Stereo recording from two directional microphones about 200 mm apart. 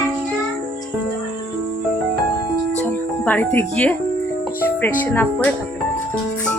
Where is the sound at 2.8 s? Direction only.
10° left (ahead or behind).